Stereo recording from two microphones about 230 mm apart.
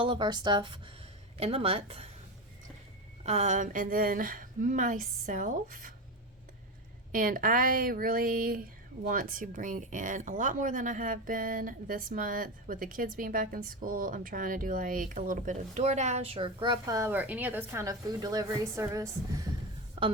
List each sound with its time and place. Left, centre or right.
0.0 s speech: right
3.2 s speech: right
7.1 s speech: right